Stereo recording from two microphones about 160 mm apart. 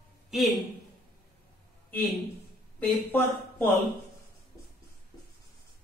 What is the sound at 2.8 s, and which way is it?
Speech, 10° left (ahead or behind).